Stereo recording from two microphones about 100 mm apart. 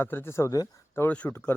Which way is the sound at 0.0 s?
20° left (ahead or behind).